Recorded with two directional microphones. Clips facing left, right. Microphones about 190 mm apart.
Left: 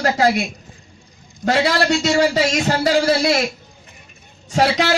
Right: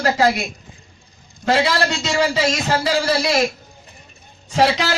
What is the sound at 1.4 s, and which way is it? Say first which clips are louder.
A man's voice: left 1 dB; 45° left (ahead or behind).